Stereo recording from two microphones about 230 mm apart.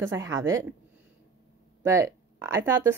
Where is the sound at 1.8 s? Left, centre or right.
Centre.